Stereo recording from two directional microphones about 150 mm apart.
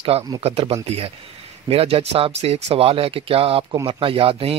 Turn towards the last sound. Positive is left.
turn(degrees=-40)  # may be behind; listen again after turning